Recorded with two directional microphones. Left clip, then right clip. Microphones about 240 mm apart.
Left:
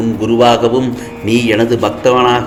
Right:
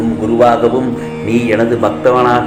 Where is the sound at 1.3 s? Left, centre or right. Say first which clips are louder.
Left 1 dB; left.